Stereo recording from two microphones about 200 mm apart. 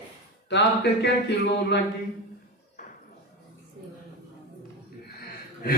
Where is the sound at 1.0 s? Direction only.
60° left (ahead or behind).